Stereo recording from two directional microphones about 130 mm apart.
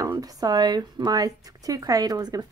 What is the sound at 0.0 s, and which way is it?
Speech, 25° right (ahead or behind).